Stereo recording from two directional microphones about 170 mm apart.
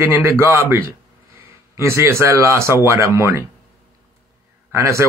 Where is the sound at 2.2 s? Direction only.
15° right (ahead or behind).